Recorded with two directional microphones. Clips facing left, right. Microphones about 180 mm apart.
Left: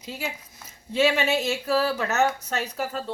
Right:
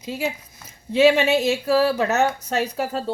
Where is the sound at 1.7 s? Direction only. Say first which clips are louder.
Right 5 dB; 35° right (ahead or behind).